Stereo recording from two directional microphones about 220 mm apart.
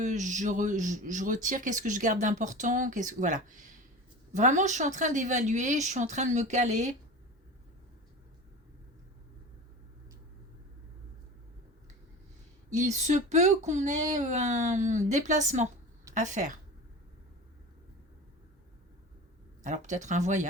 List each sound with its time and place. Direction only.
0.0 s speech: 35° right (ahead or behind)
12.7 s speech: 35° right (ahead or behind)
19.6 s speech: 35° right (ahead or behind)